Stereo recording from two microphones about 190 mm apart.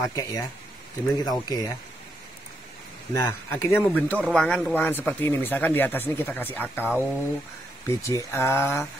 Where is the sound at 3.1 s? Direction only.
15° left (ahead or behind).